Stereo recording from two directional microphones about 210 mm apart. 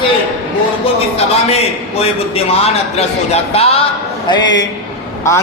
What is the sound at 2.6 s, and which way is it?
A man's voice, 30° left (ahead or behind).